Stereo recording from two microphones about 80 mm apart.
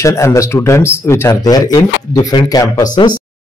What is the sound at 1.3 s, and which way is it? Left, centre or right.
Speech, left.